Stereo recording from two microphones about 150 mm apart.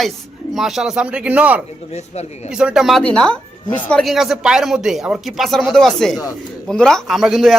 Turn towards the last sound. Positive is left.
turn(degrees=0)  # may be behind; listen again after turning